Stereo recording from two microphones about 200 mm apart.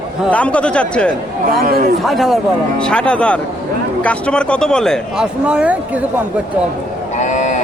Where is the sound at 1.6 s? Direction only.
50° right (ahead or behind).